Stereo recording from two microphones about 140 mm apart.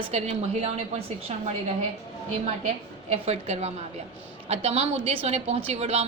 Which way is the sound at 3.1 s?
50° right (ahead or behind).